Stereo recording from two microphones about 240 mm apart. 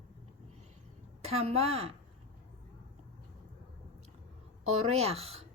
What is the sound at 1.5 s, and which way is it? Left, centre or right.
Speech, right.